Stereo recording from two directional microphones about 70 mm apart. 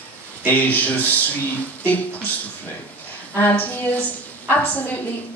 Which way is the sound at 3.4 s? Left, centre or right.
Left.